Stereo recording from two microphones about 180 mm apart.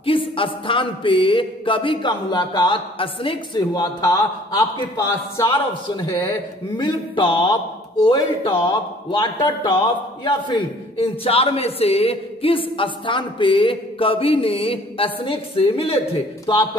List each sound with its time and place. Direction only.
0.0 s music: 30° left (ahead or behind)
6.8 s music: 30° left (ahead or behind)
10.2 s a man's voice: 30° left (ahead or behind)
16.5 s music: 25° left (ahead or behind)